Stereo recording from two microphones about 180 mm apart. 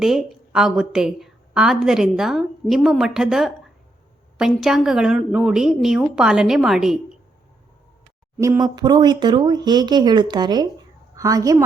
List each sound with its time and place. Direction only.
0.0 s a woman's voice: centre (ahead or behind)
8.4 s speech: 20° right (ahead or behind)